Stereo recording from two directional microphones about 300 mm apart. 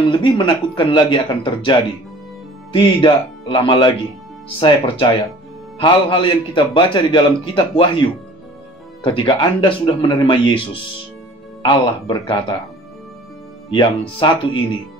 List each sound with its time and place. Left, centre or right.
0.0 s a man's voice: centre
13.7 s a man's voice: centre